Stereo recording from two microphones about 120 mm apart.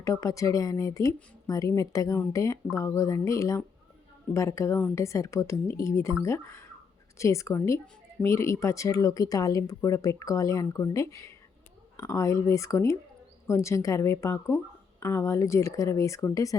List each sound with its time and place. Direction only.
0.0 s speech: 25° left (ahead or behind)